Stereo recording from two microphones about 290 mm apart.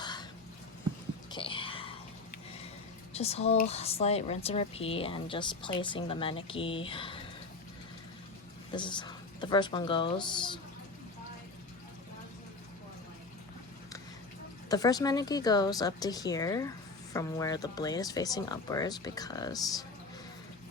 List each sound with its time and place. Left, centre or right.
0.0 s a sound: centre
1.3 s whispering: centre
3.1 s speech: left
8.7 s speech: centre
14.7 s speech: centre